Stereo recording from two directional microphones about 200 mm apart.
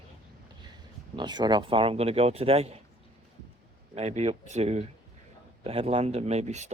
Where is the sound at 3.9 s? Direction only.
35° right (ahead or behind).